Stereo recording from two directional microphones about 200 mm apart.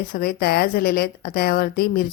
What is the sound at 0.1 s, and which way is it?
A woman's voice, 50° left (ahead or behind).